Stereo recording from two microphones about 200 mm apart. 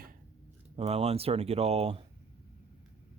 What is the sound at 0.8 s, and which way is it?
Speech, 30° right (ahead or behind).